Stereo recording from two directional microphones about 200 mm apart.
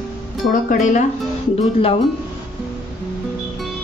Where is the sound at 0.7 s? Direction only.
40° left (ahead or behind).